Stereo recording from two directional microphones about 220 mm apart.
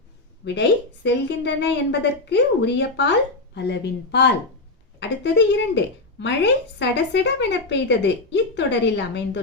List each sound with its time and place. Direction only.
0.4 s speech: 45° left (ahead or behind)